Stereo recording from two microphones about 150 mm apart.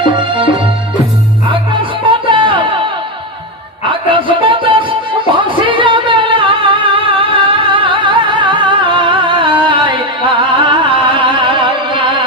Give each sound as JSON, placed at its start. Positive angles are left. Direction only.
{"t": 0.0, "sound": "music", "side_deg": -35}
{"t": 3.9, "sound": "music", "side_deg": -35}